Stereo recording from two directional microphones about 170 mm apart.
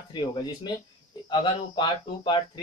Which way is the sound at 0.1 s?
25° left (ahead or behind).